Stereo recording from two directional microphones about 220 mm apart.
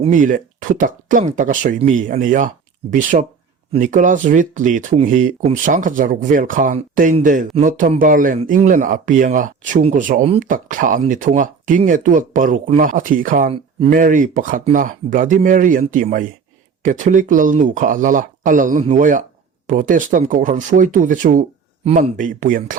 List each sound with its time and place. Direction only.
0.0 s speech: 35° right (ahead or behind)